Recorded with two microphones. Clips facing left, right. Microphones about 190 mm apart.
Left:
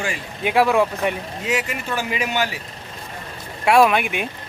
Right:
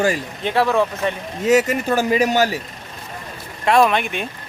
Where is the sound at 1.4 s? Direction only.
40° right (ahead or behind).